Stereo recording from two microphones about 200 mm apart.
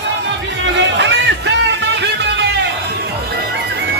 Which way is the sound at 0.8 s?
65° right (ahead or behind).